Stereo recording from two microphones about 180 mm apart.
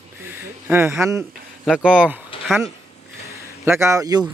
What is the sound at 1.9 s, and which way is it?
Speech, 5° right (ahead or behind).